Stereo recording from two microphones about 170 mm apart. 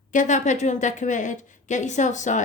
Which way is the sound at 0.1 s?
45° left (ahead or behind).